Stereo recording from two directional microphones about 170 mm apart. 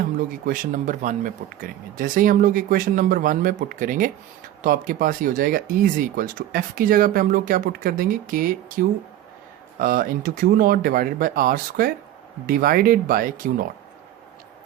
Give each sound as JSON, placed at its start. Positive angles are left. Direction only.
{"t": 0.0, "sound": "speech", "side_deg": -55}